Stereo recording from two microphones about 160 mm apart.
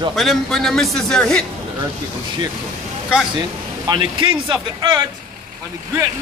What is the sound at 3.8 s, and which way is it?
Speech, 30° right (ahead or behind).